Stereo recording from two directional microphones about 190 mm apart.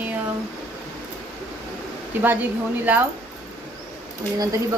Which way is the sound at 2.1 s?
10° right (ahead or behind).